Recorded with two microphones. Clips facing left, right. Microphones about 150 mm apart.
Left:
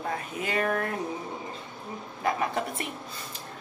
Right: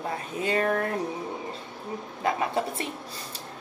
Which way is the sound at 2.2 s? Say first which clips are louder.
Right 1 dB; 30° right (ahead or behind).